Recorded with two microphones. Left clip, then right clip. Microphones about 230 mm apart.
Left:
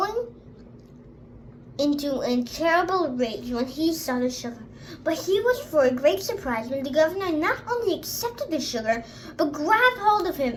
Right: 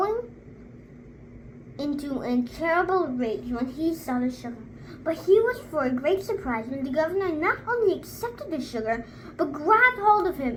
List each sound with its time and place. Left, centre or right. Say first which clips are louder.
1.7 s a woman's voice: left 6 dB; left